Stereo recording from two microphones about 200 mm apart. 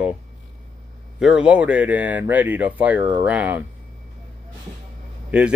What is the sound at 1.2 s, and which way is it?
Speech, 5° right (ahead or behind).